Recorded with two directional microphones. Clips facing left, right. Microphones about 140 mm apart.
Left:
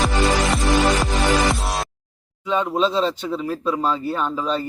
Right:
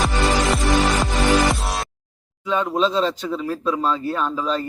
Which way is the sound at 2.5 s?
5° left (ahead or behind).